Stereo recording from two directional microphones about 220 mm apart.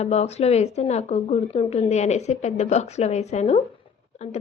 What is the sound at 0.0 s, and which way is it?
A woman's voice, 30° left (ahead or behind).